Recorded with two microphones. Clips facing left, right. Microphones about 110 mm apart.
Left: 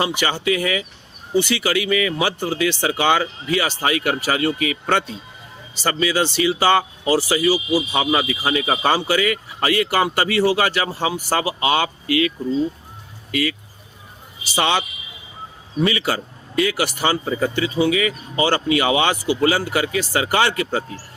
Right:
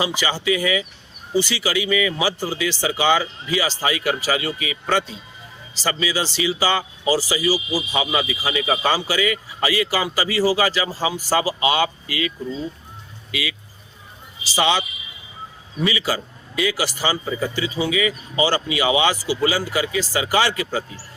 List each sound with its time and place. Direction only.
0.0 s speech: 55° left (ahead or behind)
13.3 s speech: 45° left (ahead or behind)
14.4 s speech: 55° left (ahead or behind)